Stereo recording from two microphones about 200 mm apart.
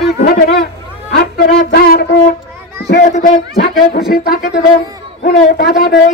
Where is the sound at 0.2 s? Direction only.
50° left (ahead or behind).